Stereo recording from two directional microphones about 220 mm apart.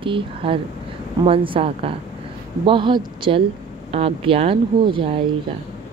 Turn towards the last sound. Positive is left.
turn(degrees=-25)  # may be behind; listen again after turning